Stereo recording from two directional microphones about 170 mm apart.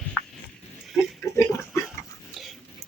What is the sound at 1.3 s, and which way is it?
Pig, 15° left (ahead or behind).